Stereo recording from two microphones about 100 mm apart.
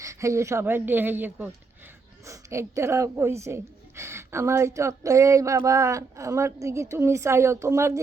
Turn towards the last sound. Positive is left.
turn(degrees=-25)  # may be behind; listen again after turning